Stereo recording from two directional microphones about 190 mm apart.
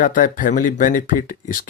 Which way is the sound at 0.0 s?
45° left (ahead or behind).